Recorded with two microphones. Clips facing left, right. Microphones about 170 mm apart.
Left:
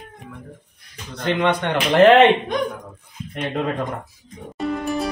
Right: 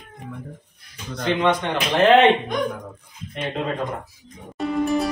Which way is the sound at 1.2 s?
60° left (ahead or behind).